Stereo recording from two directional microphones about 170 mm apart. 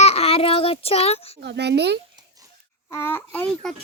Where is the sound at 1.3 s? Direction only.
80° right.